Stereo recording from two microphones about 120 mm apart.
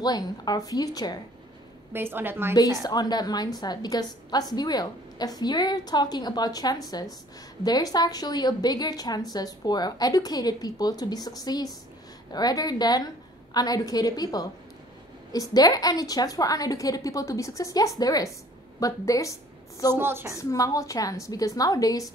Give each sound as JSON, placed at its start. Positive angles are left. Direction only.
{"t": 0.0, "sound": "a woman's voice", "side_deg": 35}
{"t": 1.9, "sound": "a woman's voice", "side_deg": -20}
{"t": 2.8, "sound": "a woman's voice", "side_deg": 35}
{"t": 19.9, "sound": "a woman's voice", "side_deg": -20}
{"t": 20.3, "sound": "a woman's voice", "side_deg": 30}